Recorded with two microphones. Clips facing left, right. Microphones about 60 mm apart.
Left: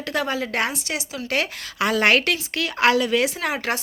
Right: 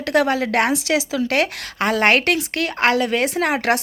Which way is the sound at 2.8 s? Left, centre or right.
Right.